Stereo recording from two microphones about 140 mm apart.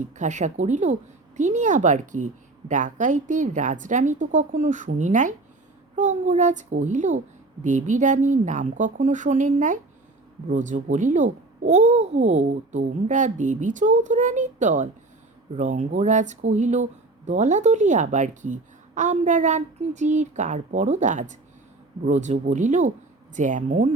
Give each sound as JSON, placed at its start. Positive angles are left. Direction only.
{"t": 0.2, "sound": "speech", "side_deg": -60}